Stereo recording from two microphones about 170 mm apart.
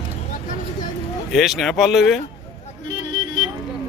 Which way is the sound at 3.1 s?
30° right (ahead or behind).